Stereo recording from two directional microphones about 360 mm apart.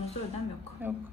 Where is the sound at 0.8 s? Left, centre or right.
Centre.